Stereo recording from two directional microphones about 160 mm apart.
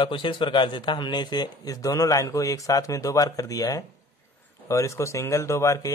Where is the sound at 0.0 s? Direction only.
30° left (ahead or behind).